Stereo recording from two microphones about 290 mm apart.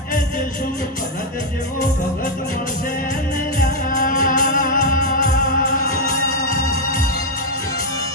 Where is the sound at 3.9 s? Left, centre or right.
Left.